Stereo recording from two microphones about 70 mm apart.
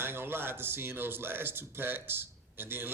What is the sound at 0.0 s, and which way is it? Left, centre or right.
Speech, right.